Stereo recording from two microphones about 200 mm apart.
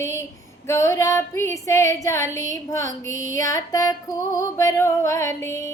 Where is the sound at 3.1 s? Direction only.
40° right (ahead or behind).